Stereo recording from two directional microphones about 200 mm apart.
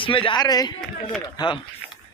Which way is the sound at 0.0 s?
25° left (ahead or behind).